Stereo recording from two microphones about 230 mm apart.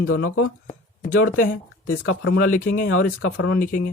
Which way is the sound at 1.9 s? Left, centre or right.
Left.